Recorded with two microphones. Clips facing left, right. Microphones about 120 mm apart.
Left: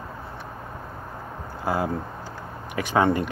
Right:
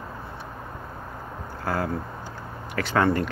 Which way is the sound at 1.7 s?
15° left (ahead or behind).